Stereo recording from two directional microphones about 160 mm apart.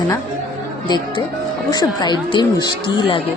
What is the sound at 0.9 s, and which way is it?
Speech, 25° left (ahead or behind).